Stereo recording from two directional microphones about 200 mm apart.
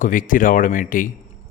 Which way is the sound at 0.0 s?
40° left (ahead or behind).